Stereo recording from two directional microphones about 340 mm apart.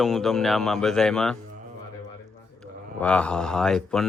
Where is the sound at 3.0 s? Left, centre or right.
Centre.